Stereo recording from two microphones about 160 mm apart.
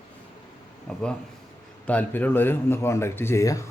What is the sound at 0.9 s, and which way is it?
Speech, 5° left (ahead or behind).